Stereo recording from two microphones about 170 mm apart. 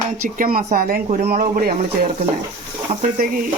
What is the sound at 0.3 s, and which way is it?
Speech, 55° right (ahead or behind).